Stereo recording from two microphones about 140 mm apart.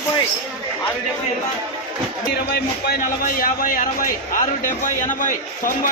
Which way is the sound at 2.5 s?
90° left.